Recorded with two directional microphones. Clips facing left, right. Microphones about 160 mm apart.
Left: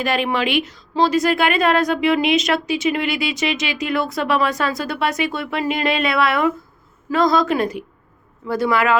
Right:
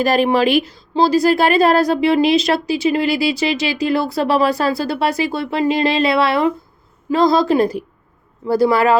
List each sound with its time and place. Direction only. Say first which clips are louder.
0.0 s speech: right 6 dB; 40° right (ahead or behind)